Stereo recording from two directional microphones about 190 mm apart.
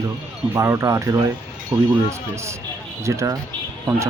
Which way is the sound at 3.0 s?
15° right (ahead or behind).